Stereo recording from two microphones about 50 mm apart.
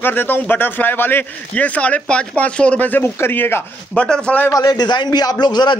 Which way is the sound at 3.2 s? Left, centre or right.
Left.